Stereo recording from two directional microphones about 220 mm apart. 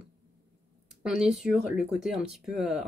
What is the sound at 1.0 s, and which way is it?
Speech, 5° right (ahead or behind).